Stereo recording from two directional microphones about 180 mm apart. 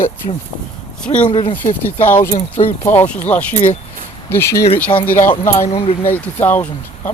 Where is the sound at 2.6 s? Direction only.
40° left (ahead or behind).